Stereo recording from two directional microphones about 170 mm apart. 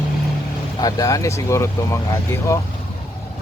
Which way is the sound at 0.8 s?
20° left (ahead or behind).